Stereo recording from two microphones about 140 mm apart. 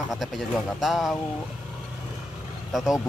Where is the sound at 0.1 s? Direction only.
Centre (ahead or behind).